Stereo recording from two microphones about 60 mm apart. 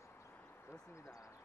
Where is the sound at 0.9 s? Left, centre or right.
Left.